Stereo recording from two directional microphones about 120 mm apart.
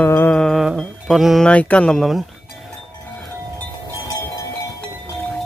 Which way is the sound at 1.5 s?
10° left (ahead or behind).